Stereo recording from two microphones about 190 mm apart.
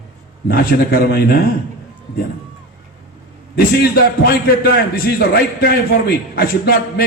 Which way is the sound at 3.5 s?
55° left (ahead or behind).